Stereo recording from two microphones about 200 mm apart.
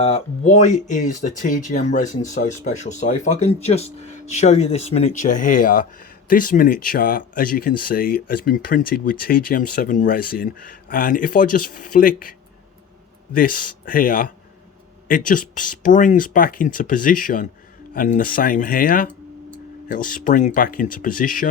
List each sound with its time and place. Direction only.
0.0 s speech: 30° left (ahead or behind)
13.3 s speech: 45° left (ahead or behind)